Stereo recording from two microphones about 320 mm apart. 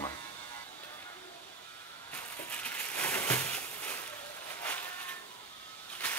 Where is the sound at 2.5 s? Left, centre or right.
Centre.